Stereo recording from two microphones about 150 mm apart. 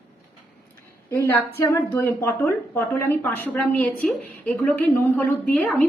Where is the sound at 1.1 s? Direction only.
15° left (ahead or behind).